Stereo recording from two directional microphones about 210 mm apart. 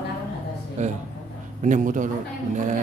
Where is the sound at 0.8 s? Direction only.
35° right (ahead or behind).